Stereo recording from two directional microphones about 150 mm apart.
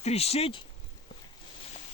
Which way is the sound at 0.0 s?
45° left (ahead or behind).